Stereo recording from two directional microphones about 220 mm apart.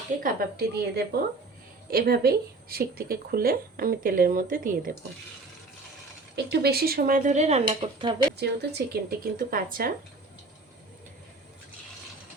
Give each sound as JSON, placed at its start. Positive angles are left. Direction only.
{"t": 0.2, "sound": "speech", "side_deg": -40}
{"t": 6.3, "sound": "speech", "side_deg": -45}
{"t": 8.4, "sound": "speech", "side_deg": -45}